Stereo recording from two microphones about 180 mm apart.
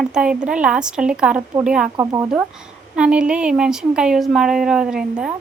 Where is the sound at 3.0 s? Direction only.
5° right (ahead or behind).